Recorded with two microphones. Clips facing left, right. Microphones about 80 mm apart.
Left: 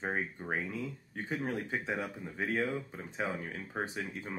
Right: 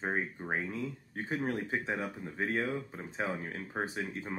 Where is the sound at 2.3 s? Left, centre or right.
Centre.